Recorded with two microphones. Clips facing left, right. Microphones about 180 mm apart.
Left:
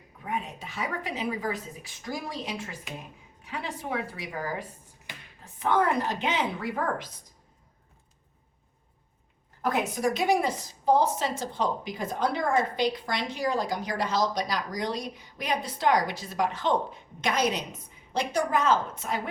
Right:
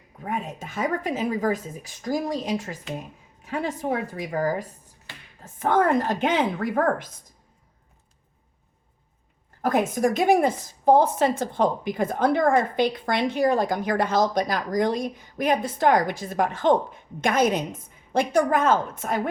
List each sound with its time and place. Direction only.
0.2 s a woman's voice: 45° right (ahead or behind)
9.6 s a woman's voice: 45° right (ahead or behind)